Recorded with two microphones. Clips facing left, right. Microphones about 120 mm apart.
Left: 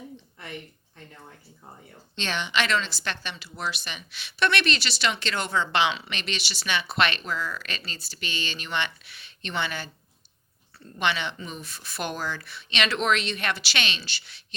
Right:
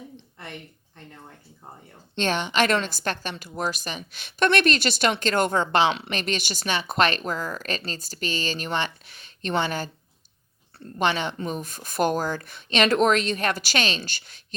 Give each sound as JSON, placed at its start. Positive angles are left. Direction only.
{"t": 2.1, "sound": "speech", "side_deg": -45}
{"t": 10.9, "sound": "speech", "side_deg": -40}